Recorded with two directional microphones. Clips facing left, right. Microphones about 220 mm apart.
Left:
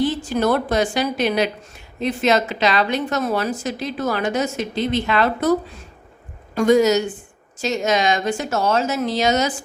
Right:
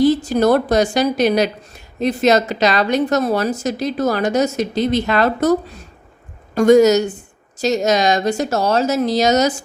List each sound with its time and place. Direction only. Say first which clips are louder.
0.0 s a woman's voice: right 6 dB; 40° right (ahead or behind)